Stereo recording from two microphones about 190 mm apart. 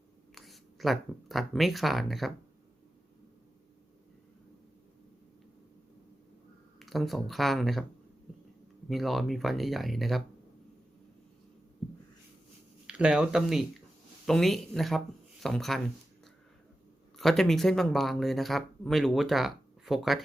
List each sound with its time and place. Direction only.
0.3 s speech: centre (ahead or behind)
6.7 s speech: centre (ahead or behind)
8.9 s speech: centre (ahead or behind)
12.9 s speech: 5° right (ahead or behind)
17.2 s speech: centre (ahead or behind)